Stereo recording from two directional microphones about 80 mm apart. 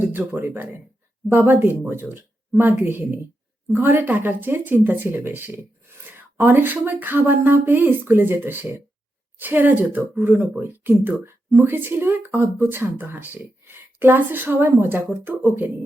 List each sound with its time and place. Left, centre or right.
0.0 s speech: right